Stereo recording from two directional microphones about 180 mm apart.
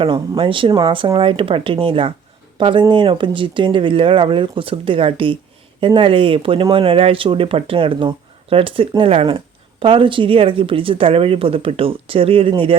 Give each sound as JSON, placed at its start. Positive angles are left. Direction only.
{"t": 0.0, "sound": "speech", "side_deg": -30}